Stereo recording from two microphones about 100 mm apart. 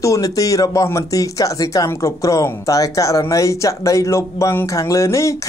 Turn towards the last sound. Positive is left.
turn(degrees=30)  # may be behind; listen again after turning